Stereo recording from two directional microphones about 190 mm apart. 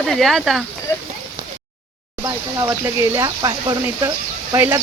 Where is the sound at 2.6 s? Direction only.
15° right (ahead or behind).